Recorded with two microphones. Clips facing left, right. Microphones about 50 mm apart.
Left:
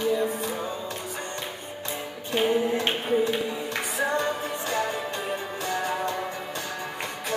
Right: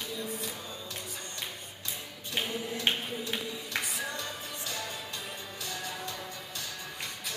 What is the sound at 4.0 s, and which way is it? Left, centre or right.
Music, left.